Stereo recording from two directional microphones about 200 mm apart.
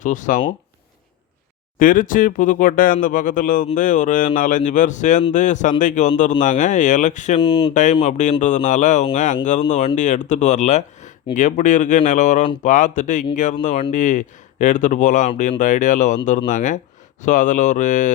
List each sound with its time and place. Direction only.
0.0 s speech: 40° left (ahead or behind)
1.8 s speech: 45° left (ahead or behind)
7.3 s speech: 25° left (ahead or behind)
7.7 s speech: 40° left (ahead or behind)